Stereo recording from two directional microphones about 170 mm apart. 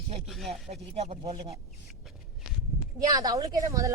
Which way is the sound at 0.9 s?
40° right (ahead or behind).